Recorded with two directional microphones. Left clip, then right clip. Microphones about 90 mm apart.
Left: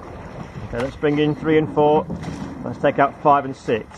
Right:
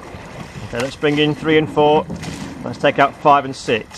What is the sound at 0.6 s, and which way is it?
Speech, 25° right (ahead or behind).